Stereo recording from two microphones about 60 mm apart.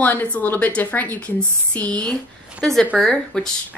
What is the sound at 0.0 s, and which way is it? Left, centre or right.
A woman's voice, left.